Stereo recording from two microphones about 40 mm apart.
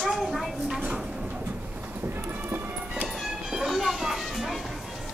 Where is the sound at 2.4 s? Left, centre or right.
Right.